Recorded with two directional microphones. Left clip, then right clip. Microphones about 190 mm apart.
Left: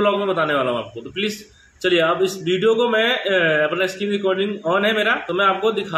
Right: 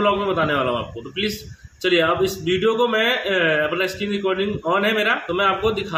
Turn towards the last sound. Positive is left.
turn(degrees=-5)  # may be behind; listen again after turning